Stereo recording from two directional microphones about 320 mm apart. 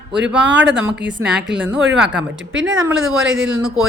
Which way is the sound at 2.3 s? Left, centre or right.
Right.